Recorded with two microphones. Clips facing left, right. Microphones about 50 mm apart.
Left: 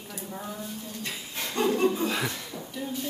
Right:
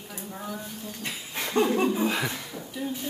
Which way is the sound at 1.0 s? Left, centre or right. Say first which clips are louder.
Right 3 dB; right.